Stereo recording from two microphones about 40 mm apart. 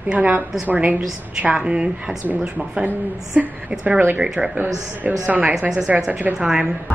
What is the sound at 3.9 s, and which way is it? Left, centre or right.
Speech, right.